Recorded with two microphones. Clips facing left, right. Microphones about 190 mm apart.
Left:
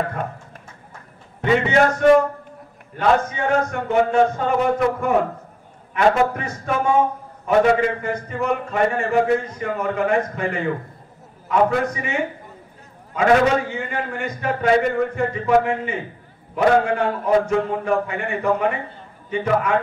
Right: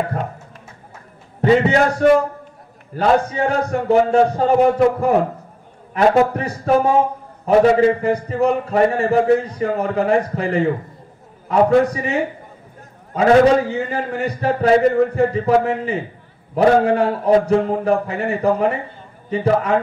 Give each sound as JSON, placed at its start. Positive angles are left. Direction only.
{"t": 1.4, "sound": "a man's voice", "side_deg": -35}
{"t": 5.9, "sound": "a man's voice", "side_deg": -35}